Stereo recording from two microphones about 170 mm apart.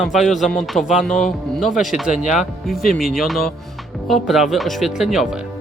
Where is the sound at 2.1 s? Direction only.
45° left (ahead or behind).